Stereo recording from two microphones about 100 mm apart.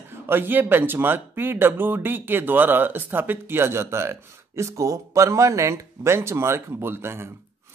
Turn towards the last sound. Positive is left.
turn(degrees=-25)  # may be behind; listen again after turning